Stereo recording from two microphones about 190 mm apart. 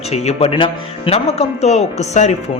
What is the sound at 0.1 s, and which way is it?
Speech, 35° left (ahead or behind).